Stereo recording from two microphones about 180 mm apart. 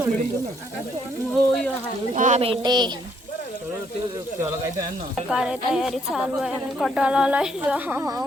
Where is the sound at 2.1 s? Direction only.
40° right (ahead or behind); by 2.9 s 25° right (ahead or behind).